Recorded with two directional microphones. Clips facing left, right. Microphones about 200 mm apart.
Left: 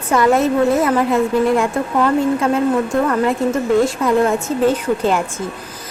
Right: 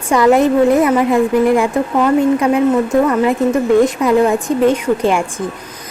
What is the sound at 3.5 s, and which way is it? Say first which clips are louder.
Speech: right 4 dB; 15° right (ahead or behind).